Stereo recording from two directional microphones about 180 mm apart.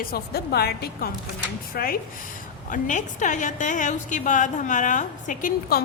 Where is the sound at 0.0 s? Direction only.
60° left (ahead or behind).